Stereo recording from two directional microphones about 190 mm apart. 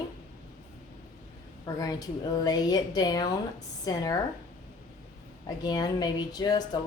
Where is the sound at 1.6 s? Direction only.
20° left (ahead or behind).